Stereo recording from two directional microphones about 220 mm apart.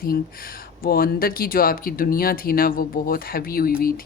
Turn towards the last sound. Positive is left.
turn(degrees=45)  # may be behind; listen again after turning